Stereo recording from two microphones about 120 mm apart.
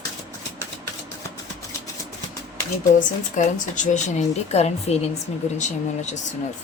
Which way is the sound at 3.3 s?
90° left.